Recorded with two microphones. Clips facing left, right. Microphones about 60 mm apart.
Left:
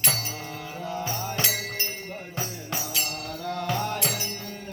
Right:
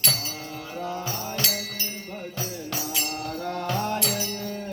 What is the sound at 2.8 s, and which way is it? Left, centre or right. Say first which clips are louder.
Music: right 1 dB; centre.